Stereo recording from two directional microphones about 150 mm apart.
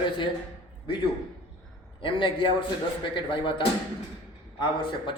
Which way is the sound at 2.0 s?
35° left (ahead or behind).